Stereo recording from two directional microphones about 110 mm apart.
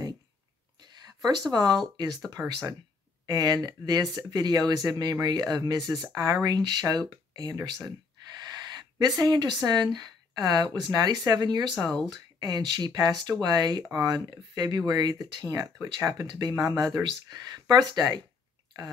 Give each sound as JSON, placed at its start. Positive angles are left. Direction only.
{"t": 0.8, "sound": "a sound", "side_deg": -35}
{"t": 1.5, "sound": "speech", "side_deg": -40}
{"t": 9.0, "sound": "speech", "side_deg": -35}